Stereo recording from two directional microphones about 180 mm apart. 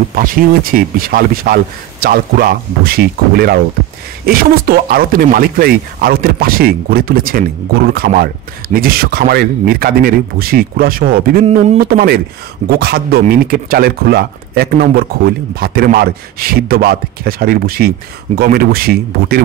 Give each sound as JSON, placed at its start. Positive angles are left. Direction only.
{"t": 0.1, "sound": "speech", "side_deg": -50}
{"t": 11.4, "sound": "a man's voice", "side_deg": -35}
{"t": 11.8, "sound": "speech", "side_deg": -55}